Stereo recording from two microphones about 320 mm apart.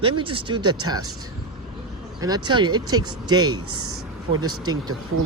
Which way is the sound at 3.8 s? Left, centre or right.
Right.